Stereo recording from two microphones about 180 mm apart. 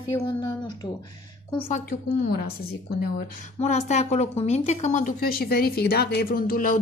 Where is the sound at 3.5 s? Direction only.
40° left (ahead or behind); by 6.8 s 55° left (ahead or behind).